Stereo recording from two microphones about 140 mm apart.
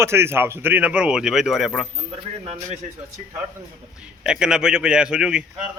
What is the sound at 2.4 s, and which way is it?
Speech, 45° right (ahead or behind).